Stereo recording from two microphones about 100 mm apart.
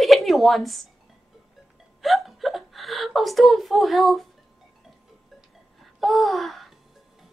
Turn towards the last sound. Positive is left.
turn(degrees=0)  # may be behind; listen again after turning